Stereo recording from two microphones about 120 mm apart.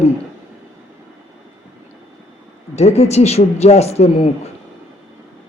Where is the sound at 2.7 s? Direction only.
65° left (ahead or behind).